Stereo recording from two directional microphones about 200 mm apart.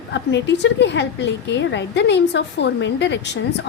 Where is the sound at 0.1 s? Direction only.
60° left (ahead or behind).